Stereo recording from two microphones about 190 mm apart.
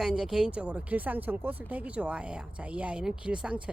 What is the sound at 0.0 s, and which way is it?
Speech, 5° right (ahead or behind).